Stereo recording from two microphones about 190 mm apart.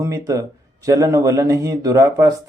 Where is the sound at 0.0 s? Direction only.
15° right (ahead or behind).